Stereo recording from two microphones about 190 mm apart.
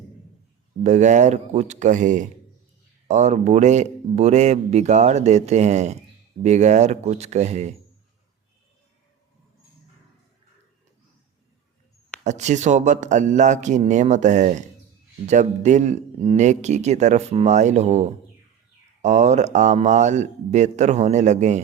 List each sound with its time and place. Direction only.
0.9 s speech: 40° right (ahead or behind)
12.2 s speech: 40° right (ahead or behind)